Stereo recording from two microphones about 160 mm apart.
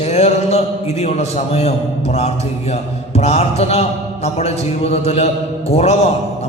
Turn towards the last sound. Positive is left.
turn(degrees=40)  # may be behind; listen again after turning